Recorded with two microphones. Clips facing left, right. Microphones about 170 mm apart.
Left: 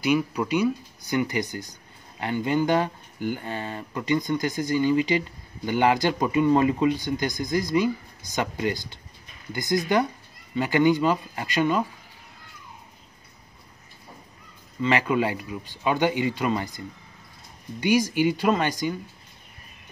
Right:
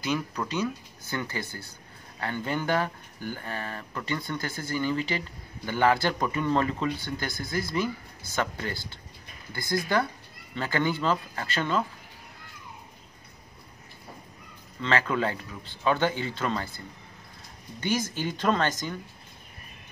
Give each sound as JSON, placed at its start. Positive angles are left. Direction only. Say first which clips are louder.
{"t": 0.0, "sound": "speech", "louder": "left 6 dB", "side_deg": 10}
{"t": 14.8, "sound": "speech", "louder": "left 4 dB", "side_deg": 15}